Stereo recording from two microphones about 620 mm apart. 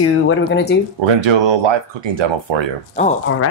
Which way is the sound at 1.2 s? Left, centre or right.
Right.